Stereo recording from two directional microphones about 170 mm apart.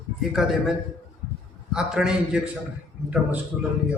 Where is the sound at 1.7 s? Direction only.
5° right (ahead or behind).